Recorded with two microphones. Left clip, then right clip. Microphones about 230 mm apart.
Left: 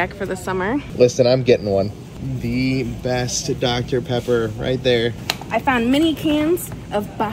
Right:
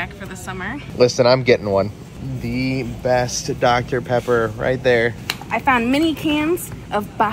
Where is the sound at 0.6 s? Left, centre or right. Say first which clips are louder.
Left 1 dB; centre.